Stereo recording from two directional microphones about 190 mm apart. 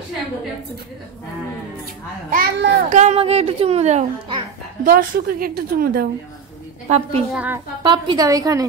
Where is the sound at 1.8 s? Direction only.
50° right (ahead or behind); by 4.3 s 35° right (ahead or behind).